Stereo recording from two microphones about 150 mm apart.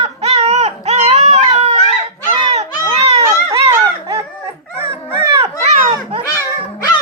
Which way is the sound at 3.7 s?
20° right (ahead or behind).